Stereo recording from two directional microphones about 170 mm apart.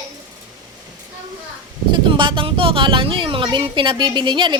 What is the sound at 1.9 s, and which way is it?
Speech, 30° right (ahead or behind).